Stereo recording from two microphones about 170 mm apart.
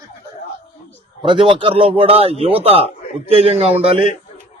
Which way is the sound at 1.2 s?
30° right (ahead or behind).